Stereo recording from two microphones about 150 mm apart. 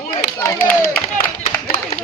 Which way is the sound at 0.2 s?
15° left (ahead or behind).